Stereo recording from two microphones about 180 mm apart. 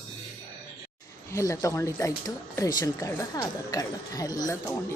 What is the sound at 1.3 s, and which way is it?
Speech, 20° left (ahead or behind).